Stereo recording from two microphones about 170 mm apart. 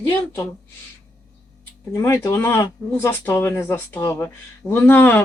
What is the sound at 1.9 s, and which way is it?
Speech, 20° left (ahead or behind).